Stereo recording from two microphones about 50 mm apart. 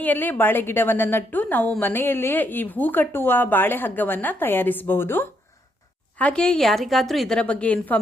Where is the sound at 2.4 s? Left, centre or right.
Left.